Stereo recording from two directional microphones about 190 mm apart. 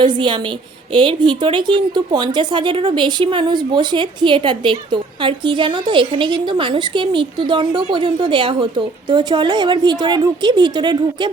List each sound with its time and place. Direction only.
0.0 s a woman's voice: 25° right (ahead or behind)